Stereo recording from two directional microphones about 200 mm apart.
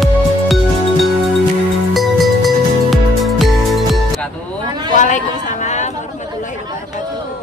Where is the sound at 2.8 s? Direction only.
Centre (ahead or behind).